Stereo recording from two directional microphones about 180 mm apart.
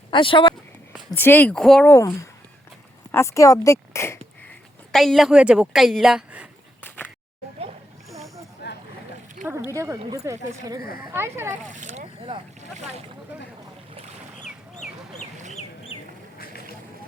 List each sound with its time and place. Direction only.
0.1 s speech: 25° left (ahead or behind)
1.1 s speech: 10° left (ahead or behind)
3.1 s speech: 15° left (ahead or behind)
4.9 s a woman's voice: centre (ahead or behind)
6.8 s a sound: 10° left (ahead or behind)
8.6 s boat: 65° left (ahead or behind)
9.5 s a sound: 15° right (ahead or behind)
10.1 s speech: 20° right (ahead or behind)
11.7 s speech: 40° right (ahead or behind)